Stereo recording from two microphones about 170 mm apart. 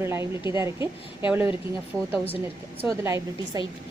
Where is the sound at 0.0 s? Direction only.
15° right (ahead or behind).